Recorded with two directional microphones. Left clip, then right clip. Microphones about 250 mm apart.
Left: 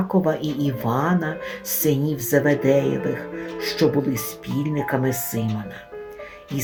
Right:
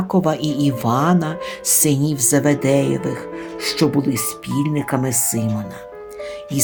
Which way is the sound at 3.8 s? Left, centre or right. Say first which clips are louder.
Right 1 dB; right.